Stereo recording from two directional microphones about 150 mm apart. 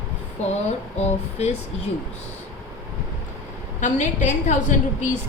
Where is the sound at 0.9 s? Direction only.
50° left (ahead or behind).